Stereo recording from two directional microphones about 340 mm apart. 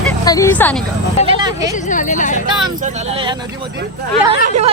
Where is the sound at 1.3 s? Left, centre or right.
Centre.